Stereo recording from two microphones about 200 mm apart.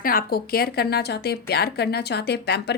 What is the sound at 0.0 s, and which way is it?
A woman's voice, 45° left (ahead or behind).